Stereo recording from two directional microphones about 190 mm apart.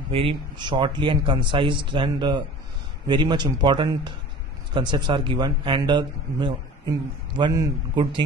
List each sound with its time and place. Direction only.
0.1 s speech: 30° right (ahead or behind)